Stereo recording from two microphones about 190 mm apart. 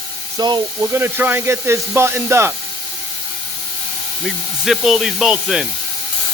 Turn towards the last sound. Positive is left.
turn(degrees=-5)  # may be behind; listen again after turning